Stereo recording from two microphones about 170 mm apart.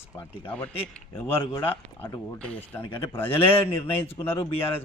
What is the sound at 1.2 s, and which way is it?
A man's voice, 10° left (ahead or behind).